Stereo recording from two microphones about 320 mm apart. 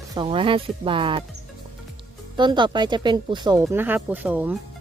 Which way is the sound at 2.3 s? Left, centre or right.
Centre.